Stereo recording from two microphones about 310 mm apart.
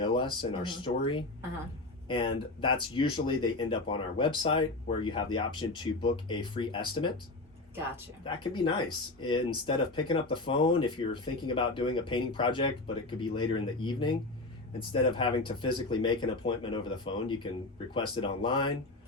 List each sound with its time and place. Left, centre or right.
0.0 s speech: centre
8.2 s speech: centre